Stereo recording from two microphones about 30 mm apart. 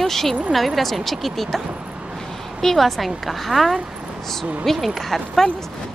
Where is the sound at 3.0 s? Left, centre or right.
Centre.